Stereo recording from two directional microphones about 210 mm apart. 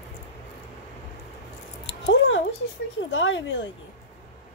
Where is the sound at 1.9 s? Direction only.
60° left (ahead or behind).